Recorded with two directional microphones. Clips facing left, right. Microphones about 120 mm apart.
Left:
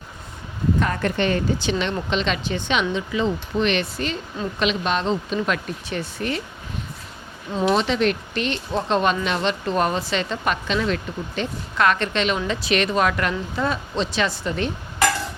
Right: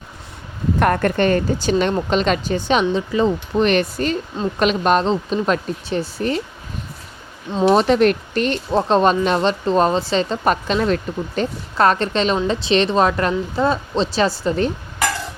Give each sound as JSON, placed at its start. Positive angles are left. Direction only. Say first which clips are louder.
{"t": 0.8, "sound": "speech", "louder": "right 8 dB", "side_deg": -55}
{"t": 5.0, "sound": "speech", "louder": "right 4 dB", "side_deg": -35}
{"t": 7.6, "sound": "speech", "louder": "right 6 dB", "side_deg": -40}